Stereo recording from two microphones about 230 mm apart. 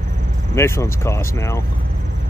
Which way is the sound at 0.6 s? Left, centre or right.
Centre.